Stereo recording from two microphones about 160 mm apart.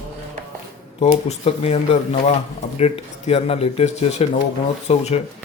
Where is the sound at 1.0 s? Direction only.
40° left (ahead or behind).